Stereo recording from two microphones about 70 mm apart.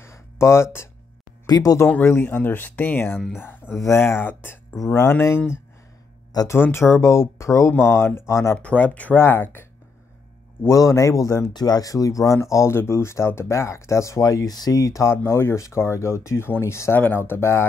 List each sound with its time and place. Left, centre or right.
0.0 s a sound: left
1.4 s speech: left
2.0 s speech: left
3.8 s speech: left
6.4 s speech: left
8.5 s speech: centre
9.1 s speech: left
10.7 s speech: left
11.5 s speech: left
14.8 s speech: left
17.0 s speech: left